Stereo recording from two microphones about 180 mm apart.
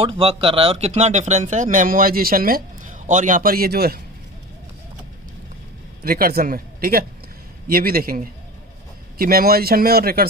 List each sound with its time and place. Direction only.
0.0 s speech: 30° right (ahead or behind); by 4.0 s 60° right (ahead or behind)
6.0 s speech: 55° right (ahead or behind)